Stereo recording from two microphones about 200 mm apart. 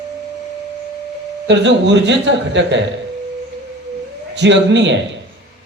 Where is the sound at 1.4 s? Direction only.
60° right (ahead or behind).